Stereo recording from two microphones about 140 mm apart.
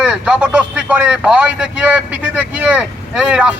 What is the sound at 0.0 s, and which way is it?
A man's voice, 5° right (ahead or behind).